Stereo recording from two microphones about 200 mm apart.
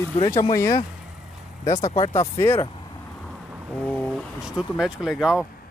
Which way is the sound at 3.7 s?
5° left (ahead or behind).